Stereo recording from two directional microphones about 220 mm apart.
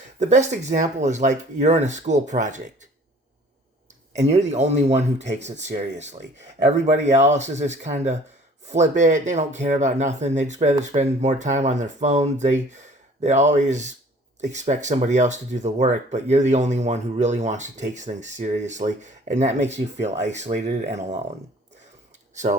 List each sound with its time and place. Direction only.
0.2 s speech: 30° right (ahead or behind)
4.1 s speech: 30° right (ahead or behind)